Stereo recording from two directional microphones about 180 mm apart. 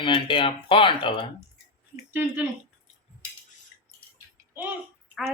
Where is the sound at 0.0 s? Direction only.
25° left (ahead or behind).